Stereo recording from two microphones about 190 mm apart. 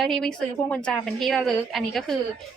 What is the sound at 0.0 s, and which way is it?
A woman's voice, centre (ahead or behind).